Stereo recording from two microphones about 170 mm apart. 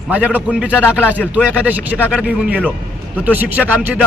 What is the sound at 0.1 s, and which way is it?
A man's voice, 10° right (ahead or behind).